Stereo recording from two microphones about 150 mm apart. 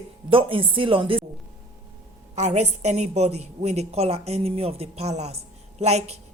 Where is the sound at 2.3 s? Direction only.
50° right (ahead or behind).